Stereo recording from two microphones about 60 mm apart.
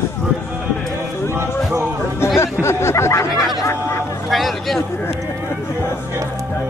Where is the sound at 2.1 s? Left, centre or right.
Left.